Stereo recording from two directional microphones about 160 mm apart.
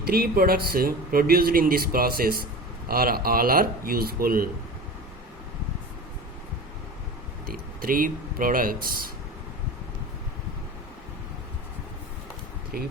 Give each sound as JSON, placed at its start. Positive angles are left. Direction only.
{"t": 0.0, "sound": "speech", "side_deg": -70}
{"t": 7.4, "sound": "speech", "side_deg": -65}
{"t": 12.7, "sound": "speech", "side_deg": -65}